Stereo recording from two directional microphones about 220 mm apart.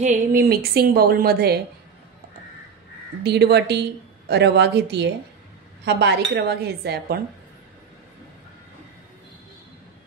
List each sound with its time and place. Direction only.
0.0 s a woman's voice: 35° right (ahead or behind)
3.3 s a woman's voice: 50° right (ahead or behind)